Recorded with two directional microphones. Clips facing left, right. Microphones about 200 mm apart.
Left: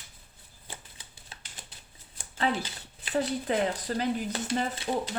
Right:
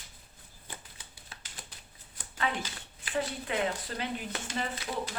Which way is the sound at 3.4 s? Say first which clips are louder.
Left 4 dB; 40° left (ahead or behind).